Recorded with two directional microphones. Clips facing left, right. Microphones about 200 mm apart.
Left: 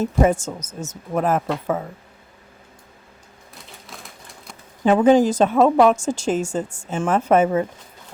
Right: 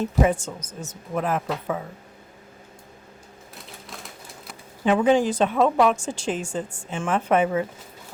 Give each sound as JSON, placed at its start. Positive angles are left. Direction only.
{"t": 0.0, "sound": "a woman's voice", "side_deg": 45}
{"t": 3.5, "sound": "typewriter", "side_deg": 0}
{"t": 4.8, "sound": "a woman's voice", "side_deg": 45}